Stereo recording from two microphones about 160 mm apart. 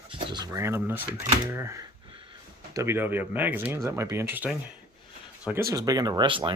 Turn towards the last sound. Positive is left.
turn(degrees=-30)  # may be behind; listen again after turning